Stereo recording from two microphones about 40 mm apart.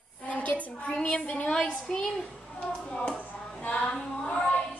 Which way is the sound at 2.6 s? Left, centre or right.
Left.